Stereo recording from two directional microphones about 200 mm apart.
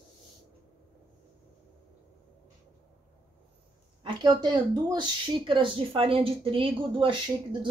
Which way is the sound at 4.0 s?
25° right (ahead or behind).